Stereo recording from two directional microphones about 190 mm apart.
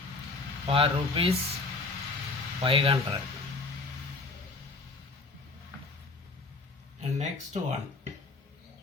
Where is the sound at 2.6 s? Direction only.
30° right (ahead or behind).